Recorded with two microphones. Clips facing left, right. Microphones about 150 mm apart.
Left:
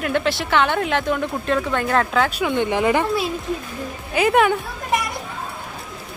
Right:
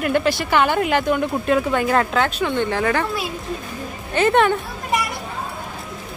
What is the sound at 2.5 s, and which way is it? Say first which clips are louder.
Speech: left 2 dB; 15° left (ahead or behind).